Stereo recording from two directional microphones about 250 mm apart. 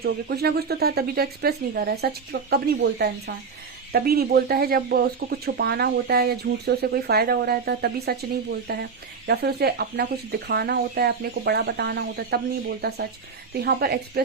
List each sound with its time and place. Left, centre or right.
0.0 s speech: right
13.6 s speech: right